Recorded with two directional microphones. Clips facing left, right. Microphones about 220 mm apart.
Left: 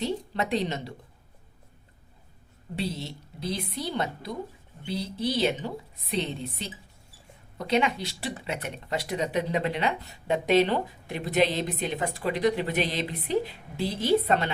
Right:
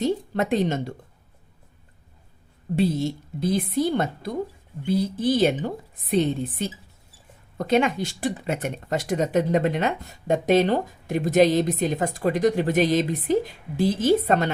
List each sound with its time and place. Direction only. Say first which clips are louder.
0.0 s speech: right 6 dB; 50° right (ahead or behind)
2.7 s speech: right 10 dB; 50° right (ahead or behind)